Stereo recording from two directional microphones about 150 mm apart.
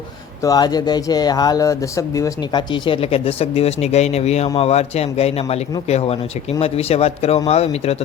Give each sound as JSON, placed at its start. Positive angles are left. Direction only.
{"t": 0.4, "sound": "a man's voice", "side_deg": 25}